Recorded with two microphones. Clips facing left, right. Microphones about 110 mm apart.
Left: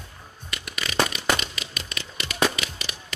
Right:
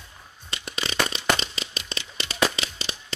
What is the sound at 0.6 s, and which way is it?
Firecracker, 30° right (ahead or behind).